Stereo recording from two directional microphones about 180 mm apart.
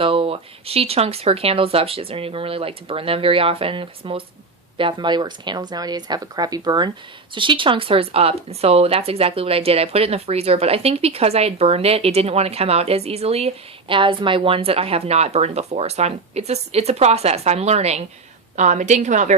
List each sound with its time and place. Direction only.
0.0 s speech: 30° right (ahead or behind)